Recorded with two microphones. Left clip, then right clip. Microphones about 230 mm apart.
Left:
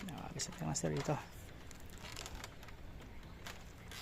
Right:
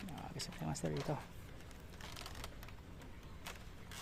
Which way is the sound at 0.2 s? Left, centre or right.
Centre.